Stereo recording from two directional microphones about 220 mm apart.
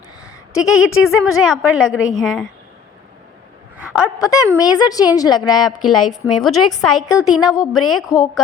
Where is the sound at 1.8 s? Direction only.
65° left (ahead or behind).